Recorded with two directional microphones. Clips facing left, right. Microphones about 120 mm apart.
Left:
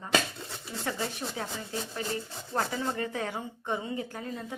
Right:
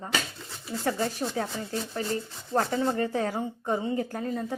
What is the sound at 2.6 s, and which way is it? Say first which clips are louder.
A woman's voice: right 5 dB; 35° right (ahead or behind).